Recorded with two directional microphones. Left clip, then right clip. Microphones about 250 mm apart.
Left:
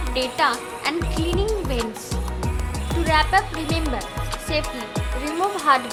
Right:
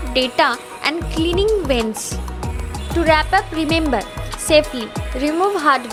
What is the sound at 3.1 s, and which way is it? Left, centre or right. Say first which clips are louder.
Speech: right 3 dB; right.